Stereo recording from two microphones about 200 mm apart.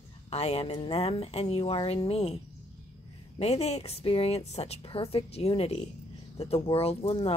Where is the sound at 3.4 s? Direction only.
30° left (ahead or behind).